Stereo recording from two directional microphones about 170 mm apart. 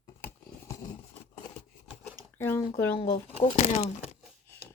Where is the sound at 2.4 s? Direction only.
15° left (ahead or behind).